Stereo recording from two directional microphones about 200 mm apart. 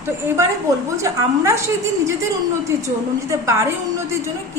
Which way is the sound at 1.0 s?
15° right (ahead or behind).